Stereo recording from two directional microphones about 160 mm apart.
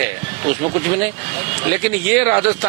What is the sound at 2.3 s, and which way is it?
Speech, 20° right (ahead or behind).